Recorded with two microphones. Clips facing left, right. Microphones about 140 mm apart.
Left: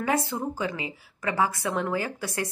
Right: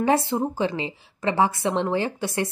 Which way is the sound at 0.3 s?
25° right (ahead or behind).